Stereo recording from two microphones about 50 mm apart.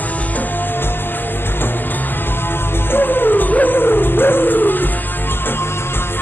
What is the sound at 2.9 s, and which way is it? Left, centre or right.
Music, left.